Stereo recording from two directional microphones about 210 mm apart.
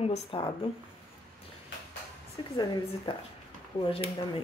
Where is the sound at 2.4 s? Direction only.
20° left (ahead or behind).